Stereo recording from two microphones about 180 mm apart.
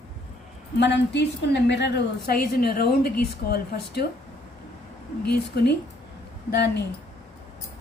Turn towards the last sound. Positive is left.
turn(degrees=65)  # may be behind; listen again after turning